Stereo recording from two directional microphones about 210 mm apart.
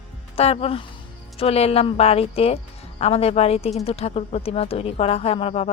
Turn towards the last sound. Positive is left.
turn(degrees=30)  # may be behind; listen again after turning